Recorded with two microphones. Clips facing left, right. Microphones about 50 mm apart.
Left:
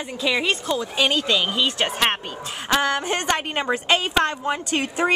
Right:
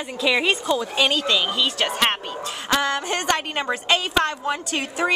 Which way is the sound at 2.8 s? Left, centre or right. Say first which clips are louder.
Left 1 dB; left.